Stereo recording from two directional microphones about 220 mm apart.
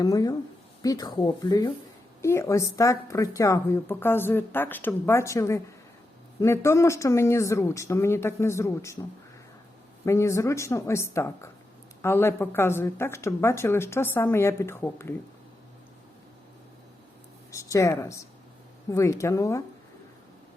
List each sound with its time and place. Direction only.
0.0 s speech: 15° left (ahead or behind)
10.1 s speech: 15° left (ahead or behind)
17.5 s speech: 15° left (ahead or behind)